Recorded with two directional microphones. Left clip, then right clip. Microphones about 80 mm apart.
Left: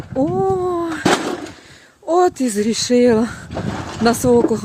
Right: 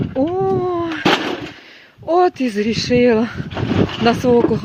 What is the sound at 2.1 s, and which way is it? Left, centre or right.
Speech, left.